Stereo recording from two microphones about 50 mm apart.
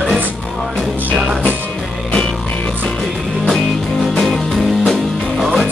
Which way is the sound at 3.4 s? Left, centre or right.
Centre.